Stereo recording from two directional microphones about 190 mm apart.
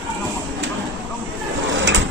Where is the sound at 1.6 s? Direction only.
75° right (ahead or behind).